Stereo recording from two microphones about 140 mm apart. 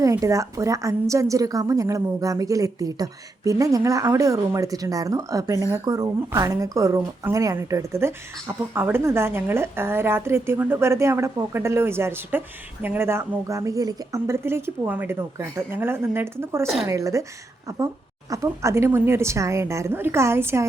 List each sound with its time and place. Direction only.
0.0 s a woman's voice: 20° right (ahead or behind)